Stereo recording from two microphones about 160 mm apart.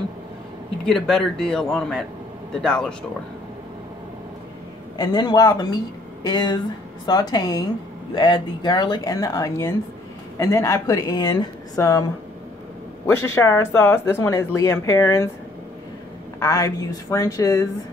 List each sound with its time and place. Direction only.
0.8 s a man's voice: 5° left (ahead or behind)
4.9 s speech: 25° left (ahead or behind)
16.3 s speech: 20° left (ahead or behind)